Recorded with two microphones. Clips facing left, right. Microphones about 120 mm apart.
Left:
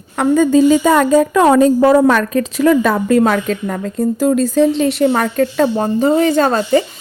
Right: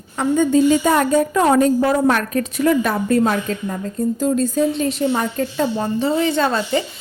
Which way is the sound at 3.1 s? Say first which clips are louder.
Left 4 dB; 90° left.